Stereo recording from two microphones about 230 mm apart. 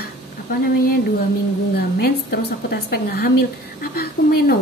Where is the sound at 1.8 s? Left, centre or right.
Left.